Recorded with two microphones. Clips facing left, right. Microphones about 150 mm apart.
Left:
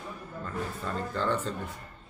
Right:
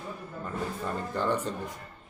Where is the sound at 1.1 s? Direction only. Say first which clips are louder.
Right 1 dB; 15° right (ahead or behind).